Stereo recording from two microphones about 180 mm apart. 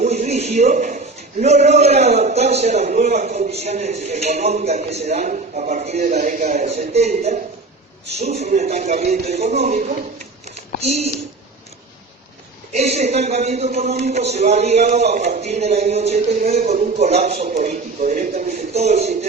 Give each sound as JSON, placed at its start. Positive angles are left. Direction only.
{"t": 0.0, "sound": "a man's voice", "side_deg": -40}
{"t": 10.4, "sound": "a sound", "side_deg": -40}
{"t": 12.7, "sound": "a man's voice", "side_deg": -35}